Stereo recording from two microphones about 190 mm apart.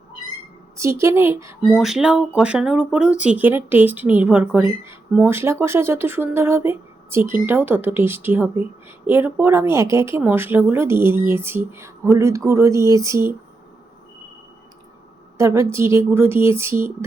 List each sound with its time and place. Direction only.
0.8 s speech: 15° right (ahead or behind)
1.6 s speech: centre (ahead or behind)
15.4 s speech: 15° right (ahead or behind)